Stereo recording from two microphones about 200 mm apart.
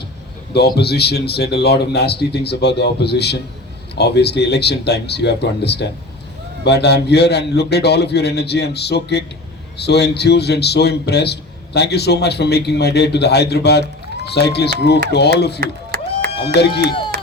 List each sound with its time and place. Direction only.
0.5 s a man's voice: 55° left (ahead or behind)
15.6 s a sound: 50° right (ahead or behind)
16.6 s a man's voice: 55° left (ahead or behind)